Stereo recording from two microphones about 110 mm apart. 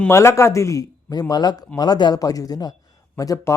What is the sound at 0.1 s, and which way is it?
A man's voice, 25° left (ahead or behind).